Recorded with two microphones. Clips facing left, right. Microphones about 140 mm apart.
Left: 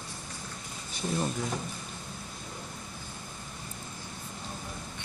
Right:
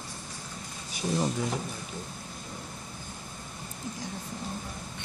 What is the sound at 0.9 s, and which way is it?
Speech, 10° right (ahead or behind).